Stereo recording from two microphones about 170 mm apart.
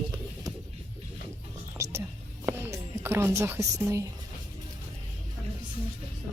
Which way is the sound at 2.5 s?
15° right (ahead or behind).